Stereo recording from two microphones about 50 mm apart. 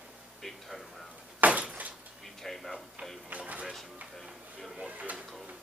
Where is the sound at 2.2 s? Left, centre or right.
Centre.